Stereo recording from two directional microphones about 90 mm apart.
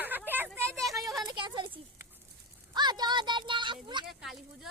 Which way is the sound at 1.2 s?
60° right (ahead or behind).